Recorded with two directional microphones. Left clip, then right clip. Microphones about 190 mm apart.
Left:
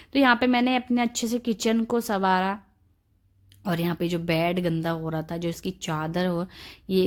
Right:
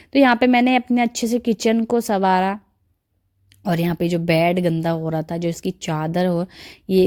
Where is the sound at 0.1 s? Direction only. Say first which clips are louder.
Right 5 dB; 30° right (ahead or behind).